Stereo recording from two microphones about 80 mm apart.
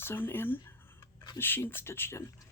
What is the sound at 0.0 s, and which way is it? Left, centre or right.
Speech, left.